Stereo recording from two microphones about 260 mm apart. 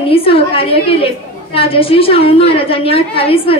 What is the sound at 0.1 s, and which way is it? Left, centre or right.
A woman's voice, left.